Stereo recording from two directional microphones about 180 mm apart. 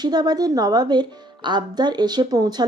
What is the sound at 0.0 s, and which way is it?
Speech, 25° right (ahead or behind).